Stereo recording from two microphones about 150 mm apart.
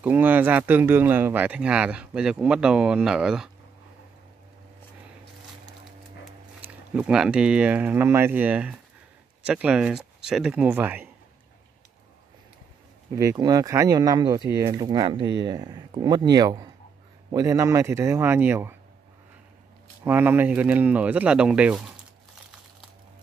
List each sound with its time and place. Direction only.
0.0 s speech: 10° right (ahead or behind)
6.6 s speech: 10° right (ahead or behind)
13.1 s speech: 20° right (ahead or behind)
20.1 s speech: 15° right (ahead or behind)